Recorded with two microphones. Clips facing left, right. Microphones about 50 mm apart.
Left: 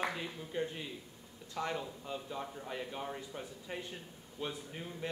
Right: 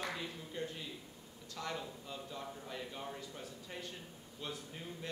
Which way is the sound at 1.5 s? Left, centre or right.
Left.